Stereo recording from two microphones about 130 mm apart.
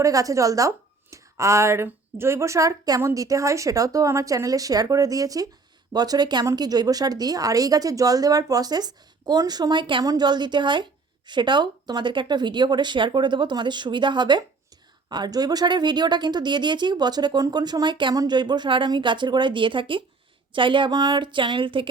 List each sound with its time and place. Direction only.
0.0 s a woman's voice: 25° right (ahead or behind); by 21.8 s 40° right (ahead or behind)